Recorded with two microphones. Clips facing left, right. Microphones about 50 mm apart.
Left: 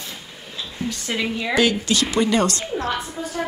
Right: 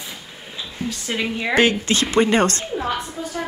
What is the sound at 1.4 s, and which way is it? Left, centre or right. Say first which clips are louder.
A woman's voice: right 3 dB; right.